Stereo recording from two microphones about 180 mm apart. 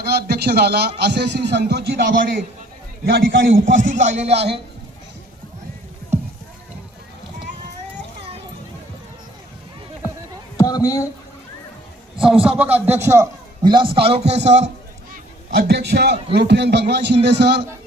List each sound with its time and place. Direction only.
0.0 s a man's voice: 60° right (ahead or behind); by 4.4 s 35° right (ahead or behind)
10.6 s speech: 20° left (ahead or behind)
12.2 s a man's voice: 5° right (ahead or behind)
13.6 s a man's voice: 25° right (ahead or behind)
15.1 s a sound: 55° right (ahead or behind)
16.3 s a man's voice: 70° right (ahead or behind)